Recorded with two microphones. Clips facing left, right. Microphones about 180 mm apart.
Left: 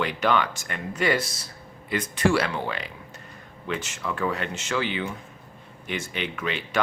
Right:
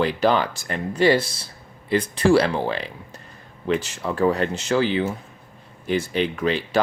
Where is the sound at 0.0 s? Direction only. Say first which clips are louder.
Right 4 dB; 35° right (ahead or behind).